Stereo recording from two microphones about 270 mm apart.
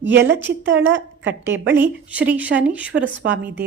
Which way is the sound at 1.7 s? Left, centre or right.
Centre.